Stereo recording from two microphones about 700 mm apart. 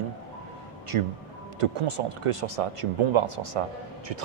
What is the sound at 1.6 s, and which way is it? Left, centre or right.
Speech, right.